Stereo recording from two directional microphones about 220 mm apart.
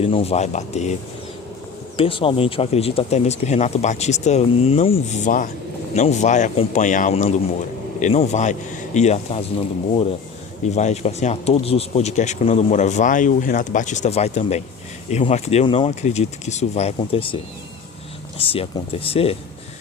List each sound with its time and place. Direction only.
0.0 s speech: 25° left (ahead or behind)
2.0 s speech: 25° left (ahead or behind)
10.8 s speech: 30° left (ahead or behind)